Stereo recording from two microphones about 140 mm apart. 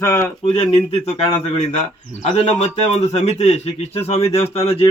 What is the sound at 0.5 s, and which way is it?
Speech, 45° left (ahead or behind).